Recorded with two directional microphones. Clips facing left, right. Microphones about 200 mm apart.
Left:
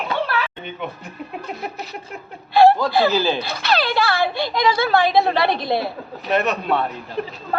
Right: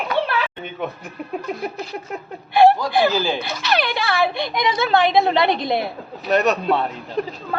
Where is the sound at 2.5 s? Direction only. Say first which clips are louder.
Left 1 dB; 15° right (ahead or behind).